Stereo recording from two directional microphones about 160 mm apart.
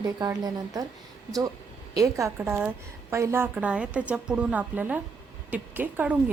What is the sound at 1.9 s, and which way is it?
A woman's voice, 20° right (ahead or behind).